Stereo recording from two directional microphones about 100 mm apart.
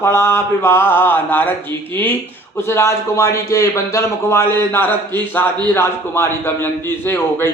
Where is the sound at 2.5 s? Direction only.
25° left (ahead or behind).